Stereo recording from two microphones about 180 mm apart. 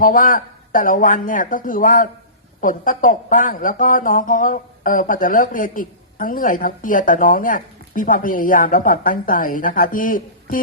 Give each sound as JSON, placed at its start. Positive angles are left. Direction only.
{"t": 0.0, "sound": "speech", "side_deg": 50}